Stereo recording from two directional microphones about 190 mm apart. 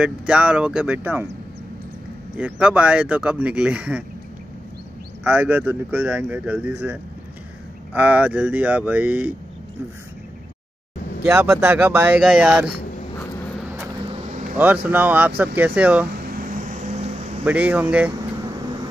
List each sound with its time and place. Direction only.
0.0 s speech: 5° right (ahead or behind)
2.3 s speech: 5° right (ahead or behind)
5.2 s speech: 10° right (ahead or behind)
11.2 s speech: 15° right (ahead or behind)
13.6 s vehicle: 10° right (ahead or behind)
14.1 s vehicle: 35° right (ahead or behind)
14.6 s speech: 10° right (ahead or behind)
16.2 s vehicle: 50° right (ahead or behind)
17.5 s speech: 10° right (ahead or behind)